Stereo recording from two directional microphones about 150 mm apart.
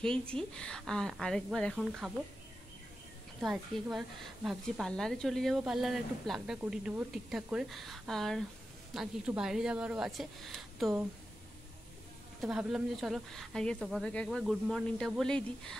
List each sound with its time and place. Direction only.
0.3 s a woman's voice: 5° left (ahead or behind)
3.3 s a woman's voice: 5° right (ahead or behind)
12.4 s a woman's voice: 5° right (ahead or behind)
14.1 s a woman's voice: 5° left (ahead or behind)